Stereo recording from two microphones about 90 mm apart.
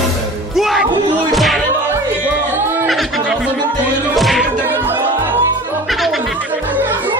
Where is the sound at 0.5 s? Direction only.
Centre (ahead or behind).